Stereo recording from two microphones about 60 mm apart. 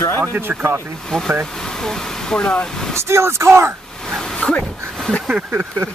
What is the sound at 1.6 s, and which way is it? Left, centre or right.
Speech, centre.